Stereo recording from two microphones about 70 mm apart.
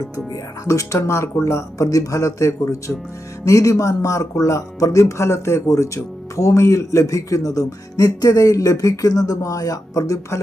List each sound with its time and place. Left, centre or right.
0.6 s speech: left